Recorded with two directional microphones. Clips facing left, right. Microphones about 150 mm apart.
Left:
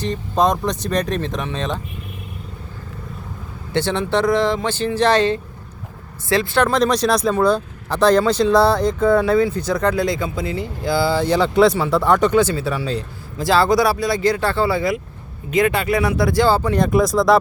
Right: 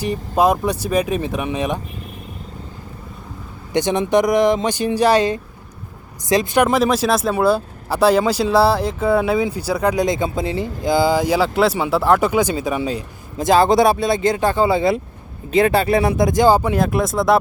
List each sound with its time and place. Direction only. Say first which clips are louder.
0.0 s speech: right 2 dB; 10° right (ahead or behind)
3.7 s speech: right 3 dB; 15° right (ahead or behind)
16.7 s speech: left 2 dB; centre (ahead or behind)